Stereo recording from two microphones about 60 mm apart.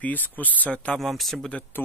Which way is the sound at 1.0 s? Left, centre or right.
Centre.